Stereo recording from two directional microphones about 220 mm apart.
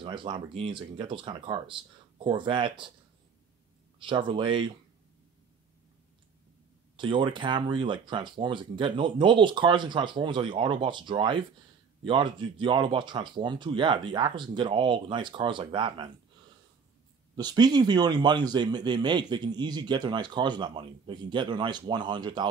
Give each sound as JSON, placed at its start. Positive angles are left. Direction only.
{"t": 0.0, "sound": "a man's voice", "side_deg": -20}
{"t": 4.0, "sound": "a man's voice", "side_deg": -20}
{"t": 7.0, "sound": "a man's voice", "side_deg": -20}
{"t": 17.4, "sound": "a man's voice", "side_deg": -20}